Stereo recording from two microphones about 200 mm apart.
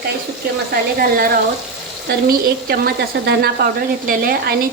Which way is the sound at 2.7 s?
50° right (ahead or behind).